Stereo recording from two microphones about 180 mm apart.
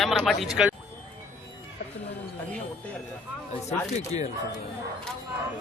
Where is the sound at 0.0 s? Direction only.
Centre (ahead or behind).